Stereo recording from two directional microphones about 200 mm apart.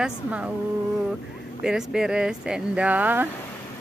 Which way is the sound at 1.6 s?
5° right (ahead or behind).